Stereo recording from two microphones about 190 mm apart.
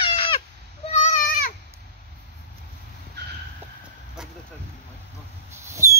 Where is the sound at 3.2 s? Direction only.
60° right (ahead or behind).